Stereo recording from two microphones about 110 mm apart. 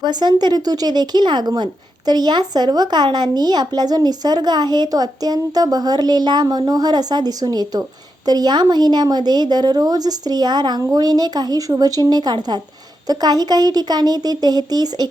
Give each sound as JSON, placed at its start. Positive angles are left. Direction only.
{"t": 0.0, "sound": "speech", "side_deg": -40}